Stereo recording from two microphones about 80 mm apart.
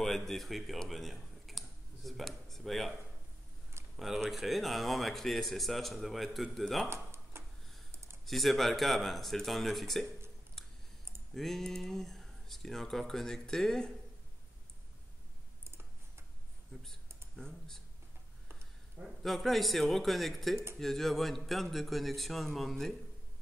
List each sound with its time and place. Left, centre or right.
0.0 s speech: centre
6.9 s tick-tock: right
7.9 s a sound: right
8.3 s speech: centre
11.3 s speech: centre
17.4 s speech: centre
19.0 s speech: centre